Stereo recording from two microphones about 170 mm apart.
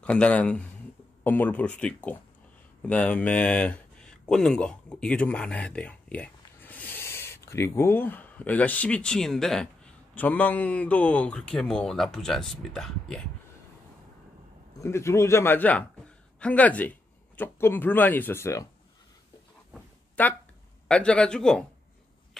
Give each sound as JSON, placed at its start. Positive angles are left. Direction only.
{"t": 0.0, "sound": "speech", "side_deg": 5}
{"t": 14.8, "sound": "speech", "side_deg": 15}
{"t": 20.2, "sound": "speech", "side_deg": 10}